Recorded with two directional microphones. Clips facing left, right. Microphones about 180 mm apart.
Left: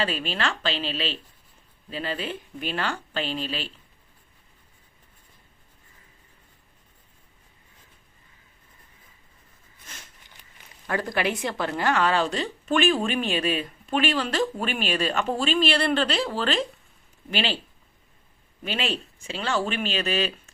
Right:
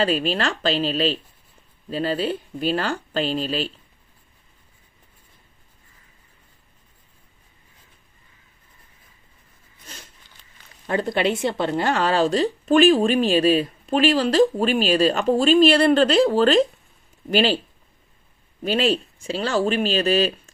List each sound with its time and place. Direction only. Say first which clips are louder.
0.0 s a woman's voice: right 6 dB; 40° right (ahead or behind)
9.9 s a sound: right 4 dB; 35° right (ahead or behind)
10.8 s a woman's voice: right 5 dB; 25° right (ahead or behind); by 17.6 s 40° right (ahead or behind)
18.6 s a woman's voice: right 8 dB; 40° right (ahead or behind)